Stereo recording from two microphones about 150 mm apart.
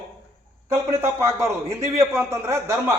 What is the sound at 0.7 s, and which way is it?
A man's voice, 20° right (ahead or behind).